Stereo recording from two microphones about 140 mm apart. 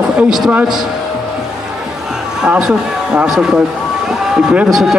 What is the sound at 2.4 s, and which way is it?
A man's voice, 5° right (ahead or behind).